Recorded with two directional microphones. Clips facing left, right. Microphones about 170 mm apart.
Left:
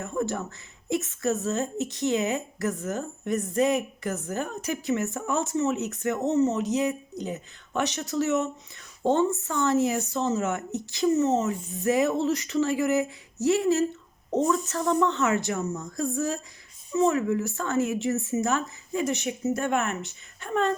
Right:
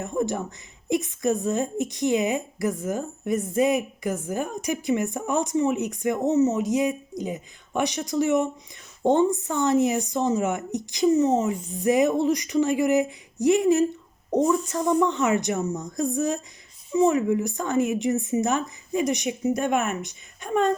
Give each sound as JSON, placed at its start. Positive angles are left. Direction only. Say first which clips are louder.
{"t": 0.0, "sound": "a woman's voice", "louder": "right 3 dB", "side_deg": -15}